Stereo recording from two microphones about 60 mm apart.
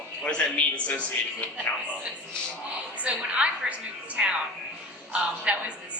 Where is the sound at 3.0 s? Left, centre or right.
Centre.